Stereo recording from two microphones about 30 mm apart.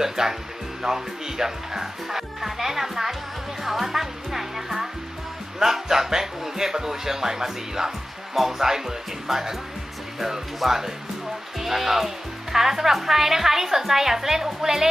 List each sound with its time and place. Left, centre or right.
0.0 s speech: centre
3.6 s music: centre
5.6 s speech: centre
10.6 s speech: centre